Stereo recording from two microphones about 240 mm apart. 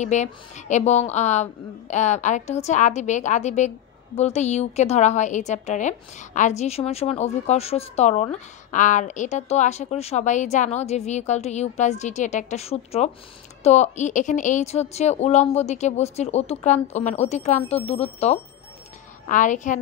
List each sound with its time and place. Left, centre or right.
0.0 s a woman's voice: left